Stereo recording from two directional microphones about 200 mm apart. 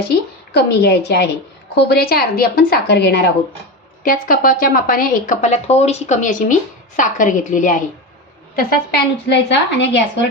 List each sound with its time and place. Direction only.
0.1 s a woman's voice: 55° left (ahead or behind)
4.0 s a woman's voice: 45° left (ahead or behind)
8.5 s a woman's voice: 55° left (ahead or behind)